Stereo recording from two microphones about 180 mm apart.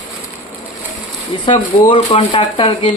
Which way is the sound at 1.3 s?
30° left (ahead or behind).